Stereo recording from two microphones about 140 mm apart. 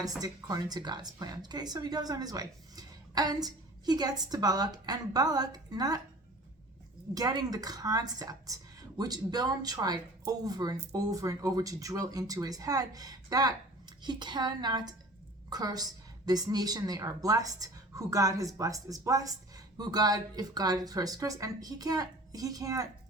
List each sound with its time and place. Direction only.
0.2 s a woman's voice: 25° right (ahead or behind)
7.1 s a woman's voice: 30° right (ahead or behind)